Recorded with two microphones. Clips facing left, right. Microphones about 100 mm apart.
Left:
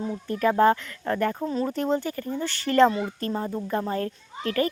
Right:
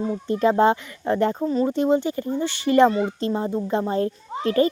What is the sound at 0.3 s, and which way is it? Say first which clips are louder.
Speech: right 2 dB; 20° right (ahead or behind).